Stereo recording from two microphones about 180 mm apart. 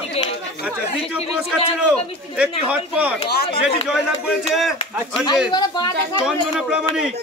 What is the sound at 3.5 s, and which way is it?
Speech, 30° left (ahead or behind).